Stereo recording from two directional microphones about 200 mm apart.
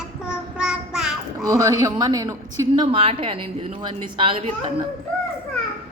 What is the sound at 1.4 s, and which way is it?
A woman's voice, 20° right (ahead or behind).